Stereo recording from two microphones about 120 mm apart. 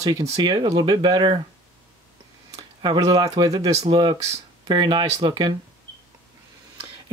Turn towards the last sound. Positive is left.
turn(degrees=-40)  # may be behind; listen again after turning